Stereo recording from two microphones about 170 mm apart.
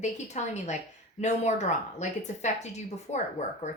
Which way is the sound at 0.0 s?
45° left (ahead or behind).